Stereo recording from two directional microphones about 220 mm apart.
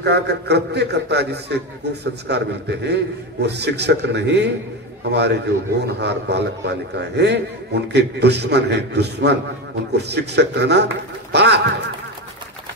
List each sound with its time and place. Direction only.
0.0 s a man's voice: 50° right (ahead or behind)